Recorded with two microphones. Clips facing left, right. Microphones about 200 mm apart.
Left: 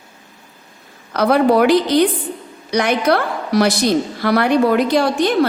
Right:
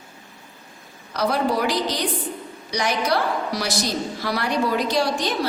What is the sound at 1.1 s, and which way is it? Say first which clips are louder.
A woman's voice: left 8 dB; 60° left (ahead or behind).